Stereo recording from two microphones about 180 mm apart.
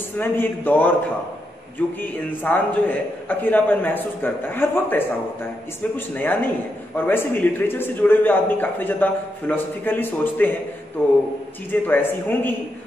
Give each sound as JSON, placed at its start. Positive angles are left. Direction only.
{"t": 0.2, "sound": "a man's voice", "side_deg": 10}
{"t": 2.0, "sound": "a man's voice", "side_deg": 10}